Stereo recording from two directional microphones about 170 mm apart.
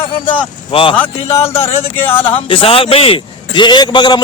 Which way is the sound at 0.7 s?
30° left (ahead or behind).